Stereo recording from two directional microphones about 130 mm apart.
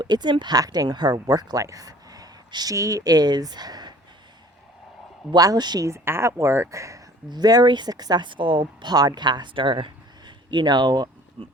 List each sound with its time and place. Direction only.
0.0 s speech: 35° right (ahead or behind)
5.3 s speech: 30° right (ahead or behind)